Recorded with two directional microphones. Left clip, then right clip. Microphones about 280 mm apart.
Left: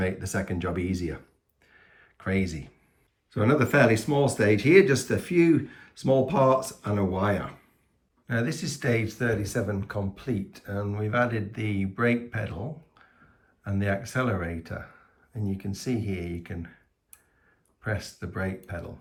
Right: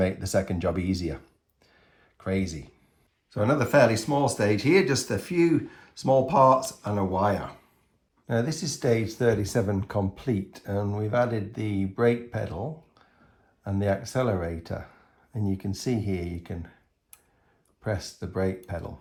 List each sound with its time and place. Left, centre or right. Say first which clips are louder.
0.0 s speech: right 4 dB; centre
1.8 s a sound: even; centre
3.2 s speech: left 1 dB; centre
17.9 s speech: right 4 dB; centre